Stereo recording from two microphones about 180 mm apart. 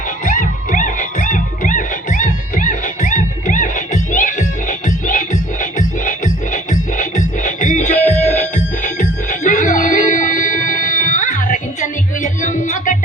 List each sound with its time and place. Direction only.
0.3 s music: 45° left (ahead or behind)